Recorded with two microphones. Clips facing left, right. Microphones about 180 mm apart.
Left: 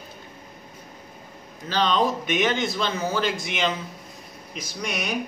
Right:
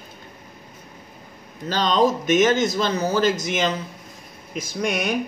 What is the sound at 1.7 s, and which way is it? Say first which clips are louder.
Speech: right 3 dB; 40° right (ahead or behind).